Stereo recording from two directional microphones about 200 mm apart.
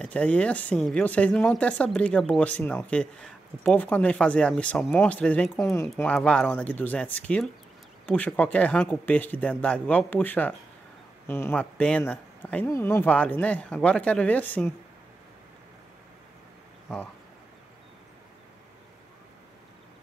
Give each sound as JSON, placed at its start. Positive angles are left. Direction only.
{"t": 0.0, "sound": "speech", "side_deg": 5}